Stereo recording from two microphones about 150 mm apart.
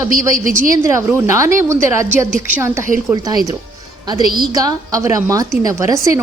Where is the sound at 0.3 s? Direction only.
65° right (ahead or behind).